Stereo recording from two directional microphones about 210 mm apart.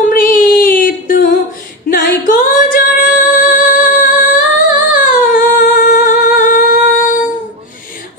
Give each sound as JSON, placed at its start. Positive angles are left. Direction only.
{"t": 0.1, "sound": "music", "side_deg": 40}